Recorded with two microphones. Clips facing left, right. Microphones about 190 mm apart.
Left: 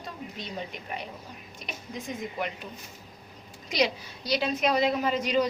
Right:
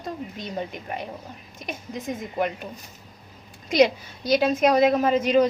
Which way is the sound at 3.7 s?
50° right (ahead or behind).